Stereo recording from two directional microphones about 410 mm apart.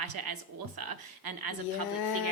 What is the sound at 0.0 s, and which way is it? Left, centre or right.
A woman's voice, right.